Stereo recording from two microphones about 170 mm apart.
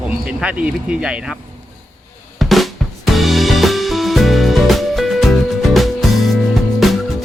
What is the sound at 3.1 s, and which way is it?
Music, centre (ahead or behind).